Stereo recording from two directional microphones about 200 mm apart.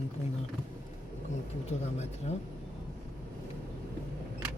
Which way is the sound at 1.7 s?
35° left (ahead or behind).